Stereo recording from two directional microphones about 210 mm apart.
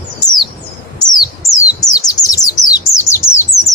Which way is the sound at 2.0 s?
15° left (ahead or behind).